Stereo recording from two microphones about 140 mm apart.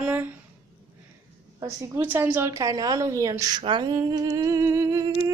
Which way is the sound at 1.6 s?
20° right (ahead or behind).